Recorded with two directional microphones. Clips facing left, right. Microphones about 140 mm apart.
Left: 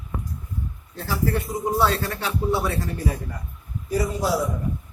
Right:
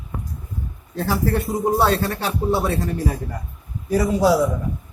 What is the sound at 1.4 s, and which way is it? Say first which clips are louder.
Speech: right 4 dB; 30° right (ahead or behind).